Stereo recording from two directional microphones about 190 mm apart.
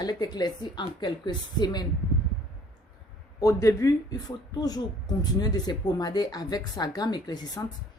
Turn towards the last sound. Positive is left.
turn(degrees=20)  # may be behind; listen again after turning